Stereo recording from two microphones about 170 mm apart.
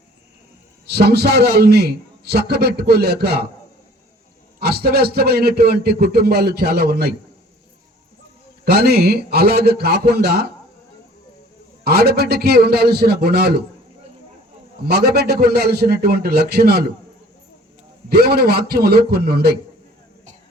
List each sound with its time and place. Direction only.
0.9 s a man's voice: 70° right (ahead or behind)
4.6 s a man's voice: 70° right (ahead or behind)
8.6 s a man's voice: 70° right (ahead or behind)
11.9 s a man's voice: 70° right (ahead or behind)
14.8 s a man's voice: 70° right (ahead or behind)
18.1 s a man's voice: 65° right (ahead or behind)